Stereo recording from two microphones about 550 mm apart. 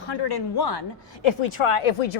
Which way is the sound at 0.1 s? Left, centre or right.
Left.